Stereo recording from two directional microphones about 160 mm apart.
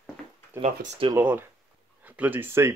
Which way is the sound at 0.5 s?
15° right (ahead or behind).